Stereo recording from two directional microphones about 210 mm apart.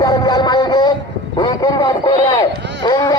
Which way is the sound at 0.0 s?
20° left (ahead or behind).